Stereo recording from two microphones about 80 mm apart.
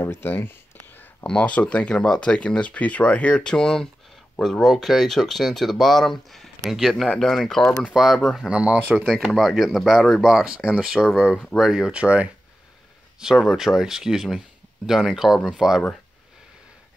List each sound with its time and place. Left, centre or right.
0.0 s a sound: left
1.2 s speech: centre
9.3 s speech: centre